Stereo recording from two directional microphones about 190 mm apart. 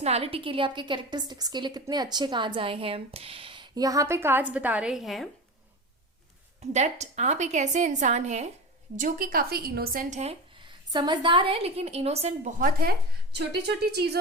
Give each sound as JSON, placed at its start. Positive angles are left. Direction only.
{"t": 0.0, "sound": "a woman's voice", "side_deg": -30}
{"t": 6.6, "sound": "a woman's voice", "side_deg": -35}